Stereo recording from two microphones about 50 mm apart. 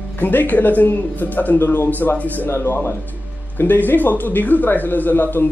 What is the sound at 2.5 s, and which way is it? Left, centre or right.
Speech, left.